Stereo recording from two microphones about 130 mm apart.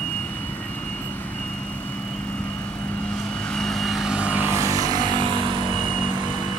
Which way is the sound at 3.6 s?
Centre (ahead or behind).